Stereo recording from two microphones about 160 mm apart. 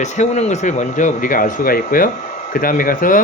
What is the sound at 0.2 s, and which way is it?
Speech, 45° left (ahead or behind).